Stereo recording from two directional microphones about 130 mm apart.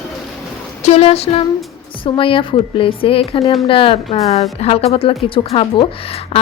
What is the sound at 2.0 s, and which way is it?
A woman's voice, 40° left (ahead or behind).